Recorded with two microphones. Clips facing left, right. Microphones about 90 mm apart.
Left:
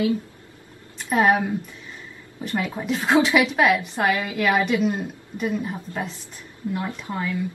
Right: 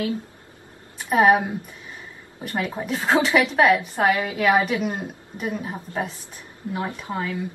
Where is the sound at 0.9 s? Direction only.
15° right (ahead or behind).